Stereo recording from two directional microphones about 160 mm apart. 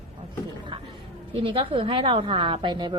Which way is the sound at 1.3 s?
35° right (ahead or behind).